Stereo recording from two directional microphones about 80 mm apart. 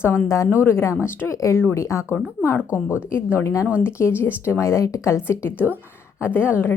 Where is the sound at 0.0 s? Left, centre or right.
Left.